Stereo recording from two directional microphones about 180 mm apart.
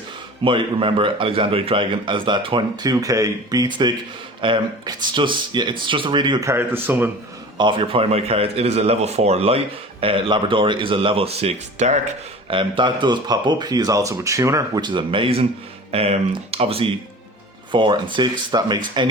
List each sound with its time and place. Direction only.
0.4 s speech: 30° right (ahead or behind); by 7.1 s 10° right (ahead or behind)
7.6 s speech: 30° right (ahead or behind)